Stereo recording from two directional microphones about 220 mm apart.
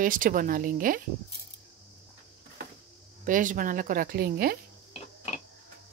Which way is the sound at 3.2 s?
35° right (ahead or behind).